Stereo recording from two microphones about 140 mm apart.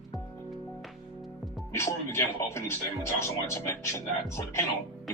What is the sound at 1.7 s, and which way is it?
Speech, 20° left (ahead or behind).